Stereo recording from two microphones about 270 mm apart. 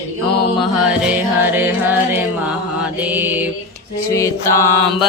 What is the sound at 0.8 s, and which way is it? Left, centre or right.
Music, centre.